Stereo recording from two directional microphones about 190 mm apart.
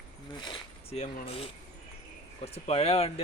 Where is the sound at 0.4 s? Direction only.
30° left (ahead or behind).